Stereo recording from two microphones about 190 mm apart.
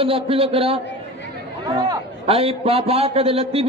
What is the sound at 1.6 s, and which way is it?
A man's voice, 20° right (ahead or behind).